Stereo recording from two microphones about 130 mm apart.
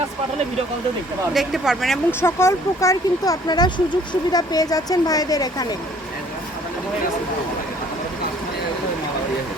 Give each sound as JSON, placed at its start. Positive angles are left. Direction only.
{"t": 1.3, "sound": "speech", "side_deg": 0}
{"t": 2.0, "sound": "speech", "side_deg": 20}